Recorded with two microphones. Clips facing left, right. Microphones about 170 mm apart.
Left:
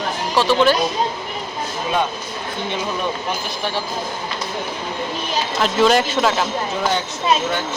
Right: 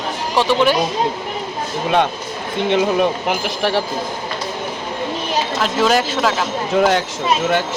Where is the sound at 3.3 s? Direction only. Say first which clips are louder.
Right 6 dB; 75° right (ahead or behind).